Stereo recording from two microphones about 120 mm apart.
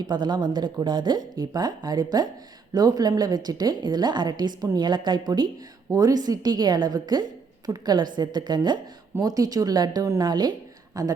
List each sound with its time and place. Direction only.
0.1 s a woman's voice: 40° right (ahead or behind)